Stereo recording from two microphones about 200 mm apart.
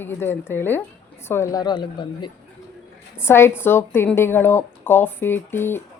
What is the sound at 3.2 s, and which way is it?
A woman's voice, 10° left (ahead or behind).